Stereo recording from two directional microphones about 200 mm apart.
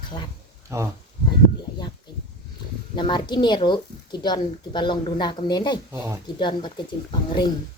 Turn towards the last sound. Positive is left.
turn(degrees=25)  # may be behind; listen again after turning